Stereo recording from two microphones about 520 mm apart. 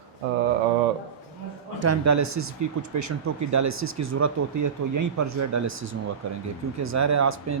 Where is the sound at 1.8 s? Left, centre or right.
Right.